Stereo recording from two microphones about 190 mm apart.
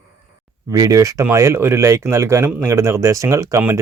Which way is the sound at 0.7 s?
20° right (ahead or behind).